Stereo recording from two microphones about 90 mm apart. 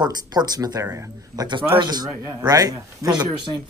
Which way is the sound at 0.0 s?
50° right (ahead or behind).